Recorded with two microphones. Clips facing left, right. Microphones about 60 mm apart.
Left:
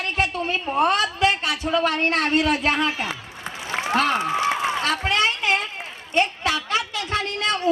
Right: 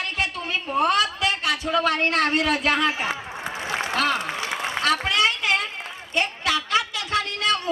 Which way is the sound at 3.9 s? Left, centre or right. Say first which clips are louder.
Left 3 dB; left.